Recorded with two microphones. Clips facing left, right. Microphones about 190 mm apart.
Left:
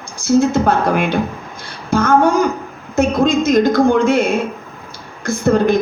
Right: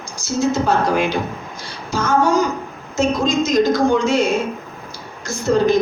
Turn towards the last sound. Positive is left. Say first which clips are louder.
# left 2 dB
turn(degrees=55)  # may be behind; listen again after turning